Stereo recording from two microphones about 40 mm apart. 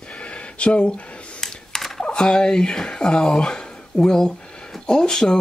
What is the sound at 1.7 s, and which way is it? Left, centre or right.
Dishes, centre.